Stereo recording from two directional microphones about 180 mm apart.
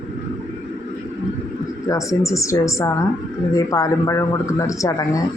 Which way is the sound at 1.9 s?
15° left (ahead or behind).